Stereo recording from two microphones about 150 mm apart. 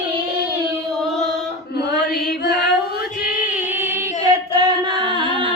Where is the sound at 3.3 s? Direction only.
10° right (ahead or behind).